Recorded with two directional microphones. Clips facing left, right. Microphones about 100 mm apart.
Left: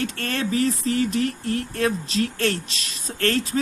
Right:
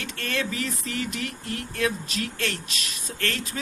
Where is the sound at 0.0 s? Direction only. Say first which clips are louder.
Left 4 dB; 40° left (ahead or behind).